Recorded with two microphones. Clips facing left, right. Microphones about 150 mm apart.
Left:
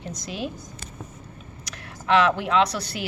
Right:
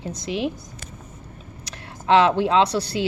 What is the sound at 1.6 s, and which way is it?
Speech, 30° right (ahead or behind).